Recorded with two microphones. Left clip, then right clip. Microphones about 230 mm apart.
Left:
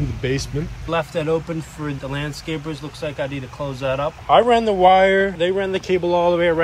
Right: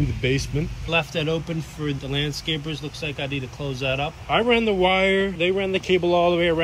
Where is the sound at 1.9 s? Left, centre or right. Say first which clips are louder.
Right 2 dB; centre.